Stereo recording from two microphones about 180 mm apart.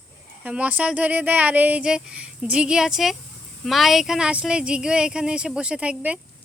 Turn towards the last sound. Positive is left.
turn(degrees=-5)  # may be behind; listen again after turning